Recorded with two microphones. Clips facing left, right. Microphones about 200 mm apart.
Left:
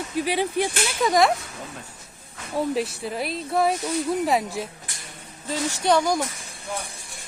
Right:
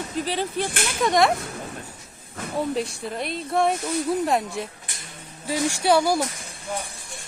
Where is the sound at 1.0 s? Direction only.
Centre (ahead or behind).